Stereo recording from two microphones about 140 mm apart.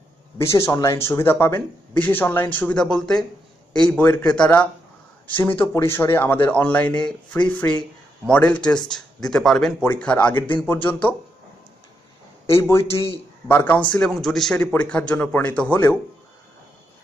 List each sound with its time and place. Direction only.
0.4 s speech: 20° left (ahead or behind)
12.4 s a man's voice: 20° left (ahead or behind)
13.9 s speech: 5° left (ahead or behind)